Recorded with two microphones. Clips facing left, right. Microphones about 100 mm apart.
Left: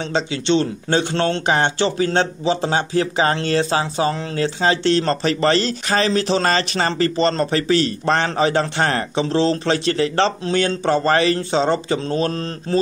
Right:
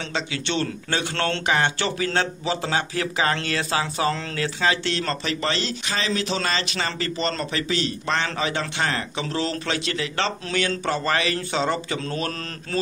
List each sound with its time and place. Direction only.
0.1 s a man's voice: 25° left (ahead or behind)
9.2 s speech: 30° left (ahead or behind)